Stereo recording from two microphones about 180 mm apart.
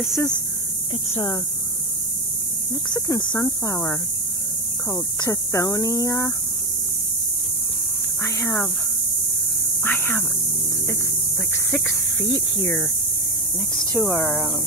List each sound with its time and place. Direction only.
1.1 s speech: 15° left (ahead or behind)
2.7 s hum: 20° left (ahead or behind)
8.2 s speech: 15° left (ahead or behind)
9.8 s speech: 10° left (ahead or behind)
11.5 s a sound: 15° left (ahead or behind)
12.5 s speech: 15° left (ahead or behind)
13.9 s speech: 5° left (ahead or behind)